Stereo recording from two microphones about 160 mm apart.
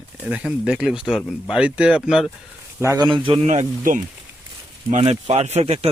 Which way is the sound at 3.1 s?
30° right (ahead or behind).